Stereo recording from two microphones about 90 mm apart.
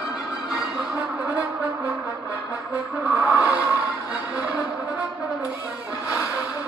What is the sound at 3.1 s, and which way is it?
Music, 20° right (ahead or behind).